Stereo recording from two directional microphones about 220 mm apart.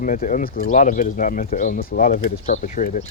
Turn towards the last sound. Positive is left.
turn(degrees=35)  # may be behind; listen again after turning